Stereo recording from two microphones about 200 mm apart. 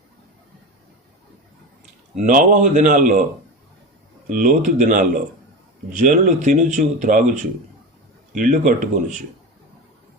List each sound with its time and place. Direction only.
2.1 s speech: 40° right (ahead or behind)
4.3 s speech: 40° right (ahead or behind)